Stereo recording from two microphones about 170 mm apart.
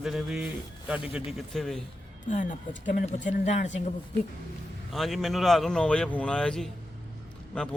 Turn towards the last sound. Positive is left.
turn(degrees=5)  # may be behind; listen again after turning